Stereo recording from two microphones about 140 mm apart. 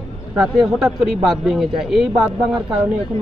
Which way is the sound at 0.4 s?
Centre (ahead or behind).